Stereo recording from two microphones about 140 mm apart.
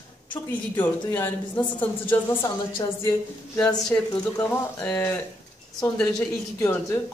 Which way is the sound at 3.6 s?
5° left (ahead or behind).